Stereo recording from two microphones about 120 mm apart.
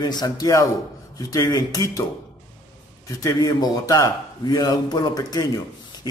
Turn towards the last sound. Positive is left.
turn(degrees=35)  # may be behind; listen again after turning